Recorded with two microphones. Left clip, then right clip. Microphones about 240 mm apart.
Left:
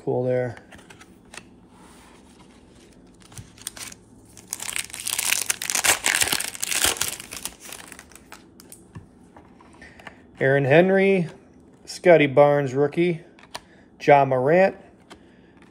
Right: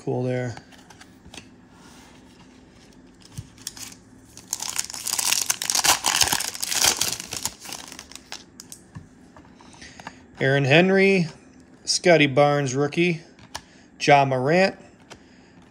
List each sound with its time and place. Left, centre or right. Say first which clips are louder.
0.0 s speech: left 4 dB; centre
3.6 s scissors: even; centre
4.6 s crumpling: even; centre
7.9 s typing: right 5 dB; right
9.8 s a sound: right 2 dB; centre
11.8 s speech: left 1 dB; centre